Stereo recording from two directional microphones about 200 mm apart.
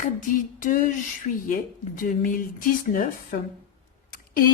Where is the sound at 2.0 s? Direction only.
45° left (ahead or behind).